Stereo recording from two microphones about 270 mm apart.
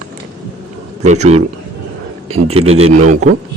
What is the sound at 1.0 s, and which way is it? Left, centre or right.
Speech, right.